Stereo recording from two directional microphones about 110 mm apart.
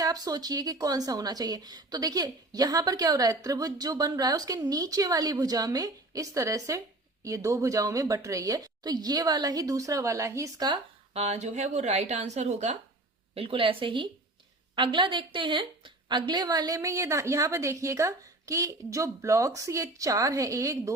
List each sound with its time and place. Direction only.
0.0 s a woman's voice: 35° right (ahead or behind)
11.1 s speech: 80° right
13.3 s a woman's voice: 55° right (ahead or behind); by 20.9 s 30° right (ahead or behind)